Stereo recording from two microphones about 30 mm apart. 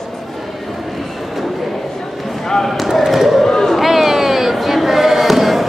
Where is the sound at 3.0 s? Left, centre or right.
Centre.